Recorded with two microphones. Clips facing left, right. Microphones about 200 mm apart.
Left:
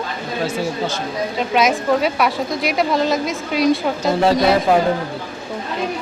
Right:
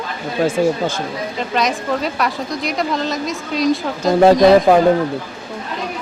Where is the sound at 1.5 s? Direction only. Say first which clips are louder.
Left 3 dB; centre (ahead or behind).